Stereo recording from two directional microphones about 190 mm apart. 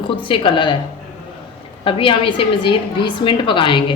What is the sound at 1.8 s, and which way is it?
Speech, 25° left (ahead or behind).